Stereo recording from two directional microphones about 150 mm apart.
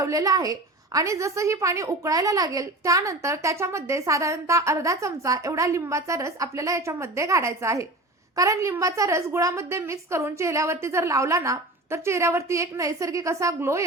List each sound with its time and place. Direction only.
0.0 s a woman's voice: 25° right (ahead or behind)